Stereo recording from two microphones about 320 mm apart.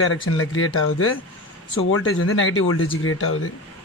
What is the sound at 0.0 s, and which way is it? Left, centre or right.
Speech, left.